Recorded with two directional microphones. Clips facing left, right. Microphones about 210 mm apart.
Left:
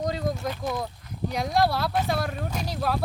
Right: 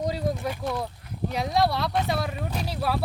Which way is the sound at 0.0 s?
10° right (ahead or behind).